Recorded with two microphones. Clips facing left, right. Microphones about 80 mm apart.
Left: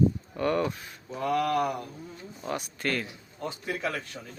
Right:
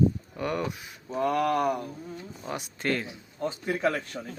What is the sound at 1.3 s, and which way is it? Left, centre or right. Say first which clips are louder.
Speech: even; centre.